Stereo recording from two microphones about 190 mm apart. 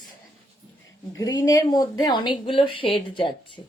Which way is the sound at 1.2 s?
20° left (ahead or behind).